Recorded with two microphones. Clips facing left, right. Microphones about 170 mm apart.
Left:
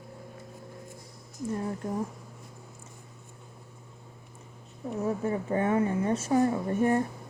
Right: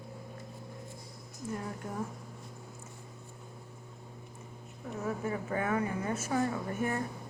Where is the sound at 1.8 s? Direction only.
40° left (ahead or behind).